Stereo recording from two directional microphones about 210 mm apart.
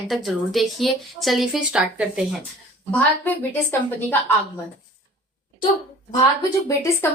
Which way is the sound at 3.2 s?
10° left (ahead or behind).